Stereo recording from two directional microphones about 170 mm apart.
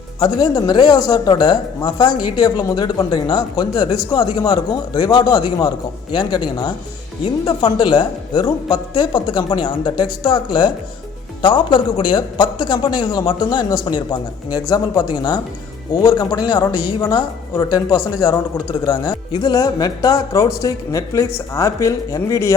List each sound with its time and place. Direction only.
0.2 s speech: 25° left (ahead or behind)